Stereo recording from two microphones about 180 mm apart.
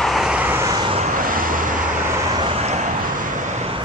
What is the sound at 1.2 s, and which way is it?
Vehicle, 50° right (ahead or behind).